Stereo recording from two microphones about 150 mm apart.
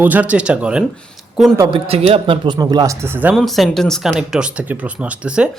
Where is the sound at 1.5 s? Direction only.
25° right (ahead or behind).